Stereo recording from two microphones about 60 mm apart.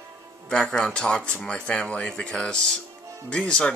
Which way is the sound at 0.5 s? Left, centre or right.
Centre.